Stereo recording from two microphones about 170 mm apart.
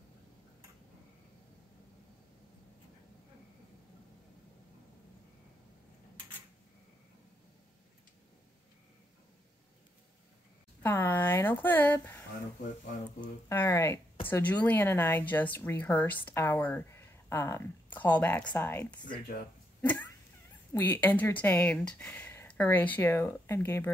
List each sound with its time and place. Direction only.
10.8 s speech: 10° left (ahead or behind)
13.5 s speech: 15° left (ahead or behind)
20.7 s speech: 10° left (ahead or behind)